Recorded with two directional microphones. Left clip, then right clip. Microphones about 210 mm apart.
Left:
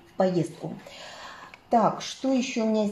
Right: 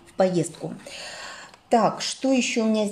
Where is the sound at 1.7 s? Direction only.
25° right (ahead or behind).